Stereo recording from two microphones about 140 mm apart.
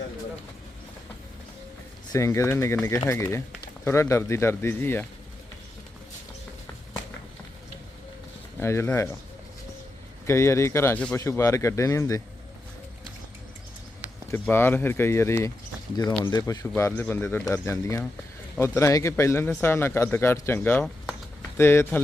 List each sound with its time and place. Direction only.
2.1 s speech: 20° left (ahead or behind)
8.5 s speech: 20° left (ahead or behind)
10.2 s speech: 20° left (ahead or behind)
14.3 s speech: 15° left (ahead or behind)
16.0 s speech: 30° left (ahead or behind)
16.5 s speech: 20° left (ahead or behind)